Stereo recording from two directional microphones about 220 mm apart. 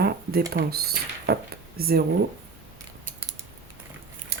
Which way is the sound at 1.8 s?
45° right (ahead or behind).